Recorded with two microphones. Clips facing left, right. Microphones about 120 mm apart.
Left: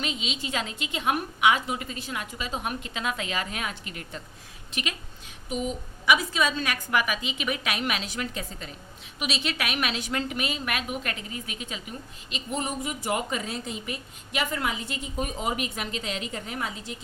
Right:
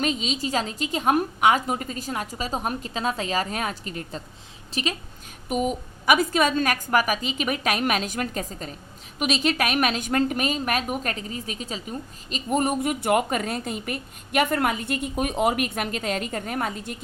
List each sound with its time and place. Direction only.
0.0 s a woman's voice: 40° right (ahead or behind)
5.5 s a woman's voice: 50° right (ahead or behind)